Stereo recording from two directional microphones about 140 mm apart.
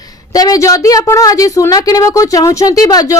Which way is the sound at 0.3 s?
25° left (ahead or behind).